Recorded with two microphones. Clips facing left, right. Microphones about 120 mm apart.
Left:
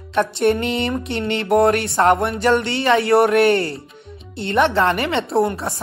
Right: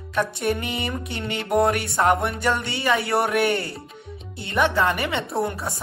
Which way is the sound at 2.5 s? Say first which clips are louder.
Left 6 dB; 65° left (ahead or behind).